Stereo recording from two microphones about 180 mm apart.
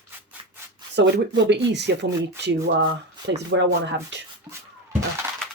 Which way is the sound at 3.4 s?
80° right.